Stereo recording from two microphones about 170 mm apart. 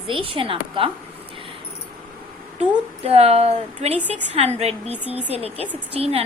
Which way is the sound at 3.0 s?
35° right (ahead or behind).